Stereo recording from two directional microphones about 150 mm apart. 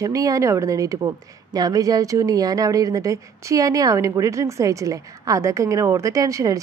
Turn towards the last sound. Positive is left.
turn(degrees=-25)  # may be behind; listen again after turning